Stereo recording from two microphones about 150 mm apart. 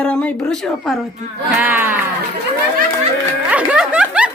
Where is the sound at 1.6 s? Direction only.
10° right (ahead or behind).